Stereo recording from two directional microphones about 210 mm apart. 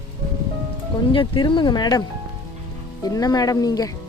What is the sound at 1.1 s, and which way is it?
Speech, 25° left (ahead or behind).